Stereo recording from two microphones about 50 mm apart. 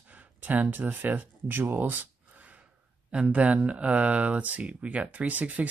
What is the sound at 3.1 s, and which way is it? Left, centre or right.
Speech, right.